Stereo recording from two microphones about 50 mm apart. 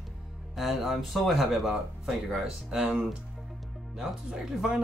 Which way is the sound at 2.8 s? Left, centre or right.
Right.